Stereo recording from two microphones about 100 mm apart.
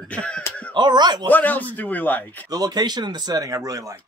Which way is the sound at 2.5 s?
40° right (ahead or behind).